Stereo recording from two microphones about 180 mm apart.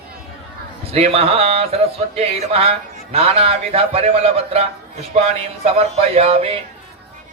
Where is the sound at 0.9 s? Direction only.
35° right (ahead or behind).